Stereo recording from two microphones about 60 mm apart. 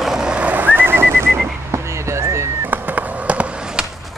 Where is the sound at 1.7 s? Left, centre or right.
Right.